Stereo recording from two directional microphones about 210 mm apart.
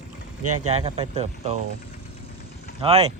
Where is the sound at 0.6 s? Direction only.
30° right (ahead or behind).